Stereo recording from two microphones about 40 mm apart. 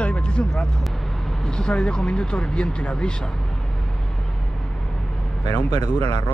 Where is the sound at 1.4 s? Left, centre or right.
Left.